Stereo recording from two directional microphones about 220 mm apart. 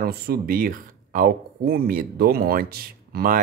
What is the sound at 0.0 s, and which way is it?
Speech, 45° right (ahead or behind).